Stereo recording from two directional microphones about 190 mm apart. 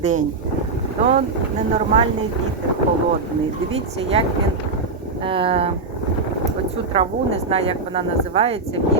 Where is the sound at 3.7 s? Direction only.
30° right (ahead or behind).